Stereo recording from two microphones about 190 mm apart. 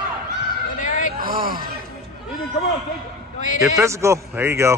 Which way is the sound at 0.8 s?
40° left (ahead or behind).